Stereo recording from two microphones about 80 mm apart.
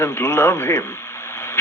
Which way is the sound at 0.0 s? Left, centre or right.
Left.